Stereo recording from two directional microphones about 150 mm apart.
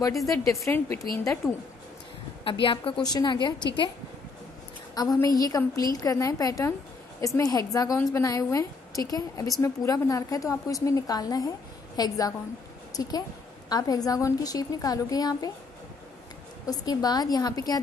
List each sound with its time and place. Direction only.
0.3 s a woman's voice: 20° left (ahead or behind)
1.4 s speech: 5° right (ahead or behind)
2.4 s a woman's voice: 35° left (ahead or behind)
4.9 s a woman's voice: 25° left (ahead or behind)
16.6 s a woman's voice: 25° left (ahead or behind)